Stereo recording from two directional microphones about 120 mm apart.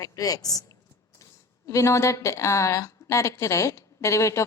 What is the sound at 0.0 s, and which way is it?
A woman's voice, 30° left (ahead or behind).